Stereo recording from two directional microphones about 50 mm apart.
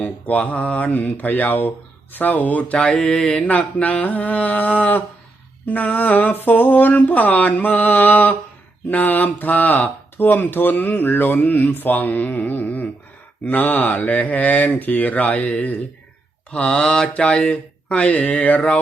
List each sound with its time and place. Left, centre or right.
0.0 s speech: left
2.7 s mantra: centre
3.8 s speech: left
16.5 s mantra: left